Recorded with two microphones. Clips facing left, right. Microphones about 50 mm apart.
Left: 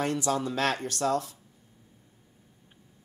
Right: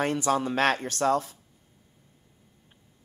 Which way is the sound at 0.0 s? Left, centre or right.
Right.